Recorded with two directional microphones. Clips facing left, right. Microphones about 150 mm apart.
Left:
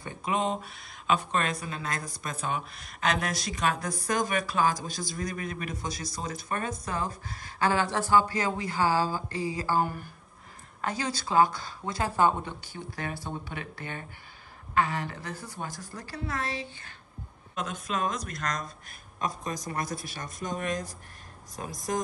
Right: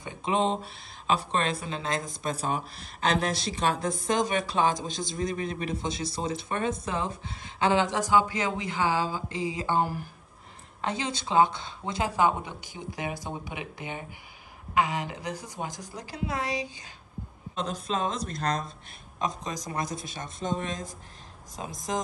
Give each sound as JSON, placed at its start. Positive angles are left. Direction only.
{"t": 0.0, "sound": "a woman's voice", "side_deg": -20}
{"t": 2.3, "sound": "a woman's voice", "side_deg": -35}
{"t": 8.6, "sound": "speech", "side_deg": 40}
{"t": 9.3, "sound": "a woman's voice", "side_deg": -20}
{"t": 17.6, "sound": "a woman's voice", "side_deg": -30}
{"t": 19.5, "sound": "a woman's voice", "side_deg": -20}